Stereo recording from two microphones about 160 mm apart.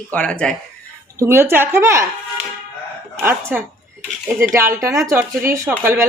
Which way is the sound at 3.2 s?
15° right (ahead or behind).